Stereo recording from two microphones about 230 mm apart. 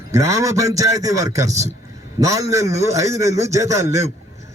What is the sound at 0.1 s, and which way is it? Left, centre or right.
A man's voice, centre.